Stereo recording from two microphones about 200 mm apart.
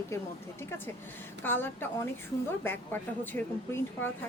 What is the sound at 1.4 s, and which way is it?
Speech, 10° left (ahead or behind).